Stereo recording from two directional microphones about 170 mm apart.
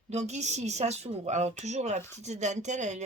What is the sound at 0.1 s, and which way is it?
Speech, 40° right (ahead or behind).